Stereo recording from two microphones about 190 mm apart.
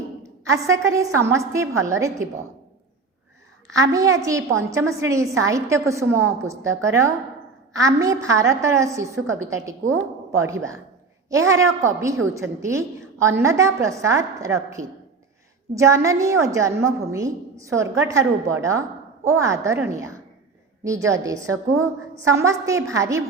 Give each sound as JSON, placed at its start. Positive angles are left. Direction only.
{"t": 0.2, "sound": "a woman's voice", "side_deg": -15}
{"t": 3.8, "sound": "a woman's voice", "side_deg": -15}